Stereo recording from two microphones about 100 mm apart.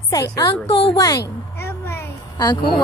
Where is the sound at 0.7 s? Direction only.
60° left (ahead or behind).